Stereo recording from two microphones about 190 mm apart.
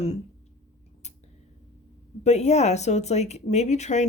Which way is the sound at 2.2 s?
35° left (ahead or behind).